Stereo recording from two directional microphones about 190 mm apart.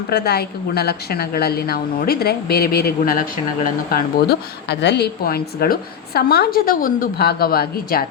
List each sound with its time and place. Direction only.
0.1 s a woman's voice: 60° left (ahead or behind)